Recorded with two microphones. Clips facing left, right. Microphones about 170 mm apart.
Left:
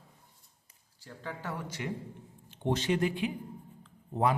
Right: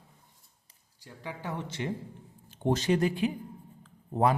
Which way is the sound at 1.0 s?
15° right (ahead or behind).